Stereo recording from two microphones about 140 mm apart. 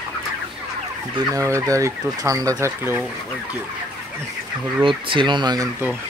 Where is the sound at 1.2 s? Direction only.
20° right (ahead or behind).